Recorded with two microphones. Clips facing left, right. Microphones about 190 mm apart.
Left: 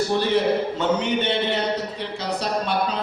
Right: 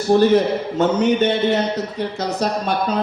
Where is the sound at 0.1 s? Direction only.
45° right (ahead or behind).